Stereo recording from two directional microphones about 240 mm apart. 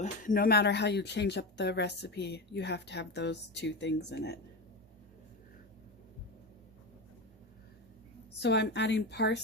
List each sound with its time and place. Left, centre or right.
0.0 s speech: left
8.4 s speech: left